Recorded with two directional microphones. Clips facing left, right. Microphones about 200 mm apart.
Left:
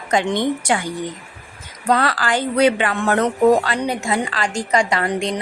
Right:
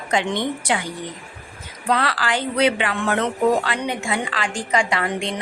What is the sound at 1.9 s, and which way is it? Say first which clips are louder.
Speech: left 3 dB; 45° left (ahead or behind).